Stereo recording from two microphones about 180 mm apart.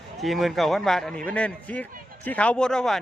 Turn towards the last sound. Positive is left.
turn(degrees=5)  # may be behind; listen again after turning